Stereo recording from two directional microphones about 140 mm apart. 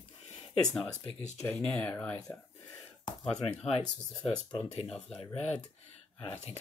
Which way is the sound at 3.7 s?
45° left (ahead or behind).